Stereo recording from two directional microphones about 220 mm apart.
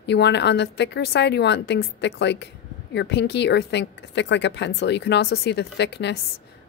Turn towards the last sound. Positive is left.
turn(degrees=50)  # may be behind; listen again after turning